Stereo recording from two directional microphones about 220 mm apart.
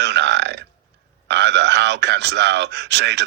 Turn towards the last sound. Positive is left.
turn(degrees=-50)  # may be behind; listen again after turning